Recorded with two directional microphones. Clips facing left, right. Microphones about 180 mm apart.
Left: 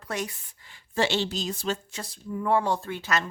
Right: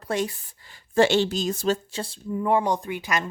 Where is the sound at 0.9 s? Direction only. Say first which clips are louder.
Right 7 dB; 50° right (ahead or behind); by 2.1 s 30° right (ahead or behind).